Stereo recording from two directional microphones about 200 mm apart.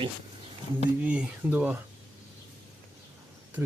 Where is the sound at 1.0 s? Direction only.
5° right (ahead or behind).